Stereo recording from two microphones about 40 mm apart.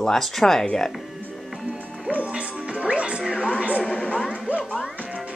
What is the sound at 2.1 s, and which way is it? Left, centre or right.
Music, right.